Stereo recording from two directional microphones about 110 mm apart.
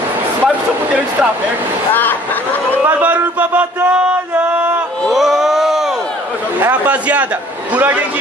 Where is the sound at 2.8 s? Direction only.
15° right (ahead or behind).